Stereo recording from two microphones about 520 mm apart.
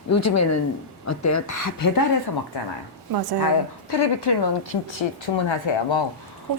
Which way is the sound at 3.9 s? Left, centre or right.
Left.